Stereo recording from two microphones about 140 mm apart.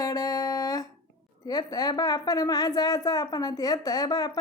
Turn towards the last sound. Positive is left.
turn(degrees=30)  # may be behind; listen again after turning